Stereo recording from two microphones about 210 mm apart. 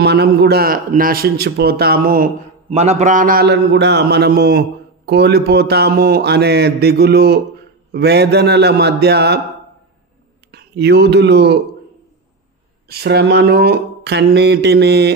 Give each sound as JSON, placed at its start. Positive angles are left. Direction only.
{"t": 0.0, "sound": "a man's voice", "side_deg": -55}
{"t": 2.7, "sound": "a man's voice", "side_deg": -30}
{"t": 10.5, "sound": "speech", "side_deg": -50}
{"t": 12.8, "sound": "a man's voice", "side_deg": -50}